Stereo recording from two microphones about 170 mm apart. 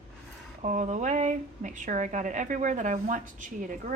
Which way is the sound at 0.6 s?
50° right (ahead or behind).